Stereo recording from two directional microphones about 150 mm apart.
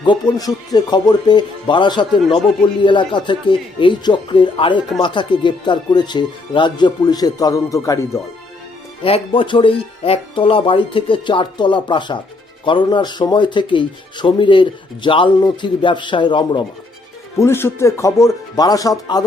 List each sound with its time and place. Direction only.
0.0 s speech: 30° left (ahead or behind)
9.0 s speech: 35° left (ahead or behind)
17.4 s speech: 15° left (ahead or behind)